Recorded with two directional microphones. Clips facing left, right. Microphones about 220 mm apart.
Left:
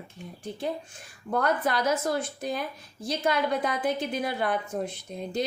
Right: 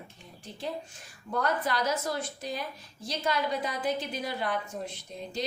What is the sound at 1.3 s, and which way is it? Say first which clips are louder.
A woman's voice: left 3 dB; 55° left (ahead or behind).